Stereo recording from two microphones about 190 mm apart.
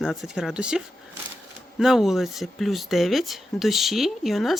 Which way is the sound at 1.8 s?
Centre (ahead or behind).